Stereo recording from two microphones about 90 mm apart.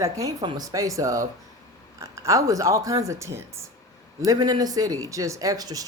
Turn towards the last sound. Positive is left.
turn(degrees=-40)  # may be behind; listen again after turning